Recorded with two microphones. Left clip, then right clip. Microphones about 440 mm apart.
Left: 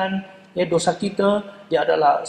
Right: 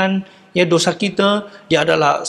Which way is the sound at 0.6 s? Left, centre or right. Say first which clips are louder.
Right 5 dB; right.